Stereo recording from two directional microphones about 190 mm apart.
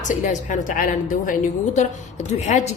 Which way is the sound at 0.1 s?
40° left (ahead or behind).